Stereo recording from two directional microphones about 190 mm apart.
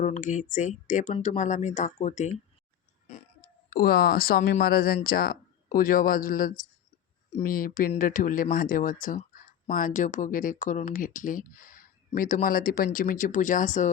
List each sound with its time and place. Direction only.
0.0 s speech: 40° left (ahead or behind)
3.7 s speech: 50° left (ahead or behind)